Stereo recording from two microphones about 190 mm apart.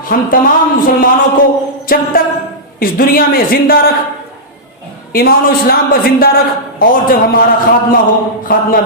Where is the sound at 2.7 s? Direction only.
50° left (ahead or behind).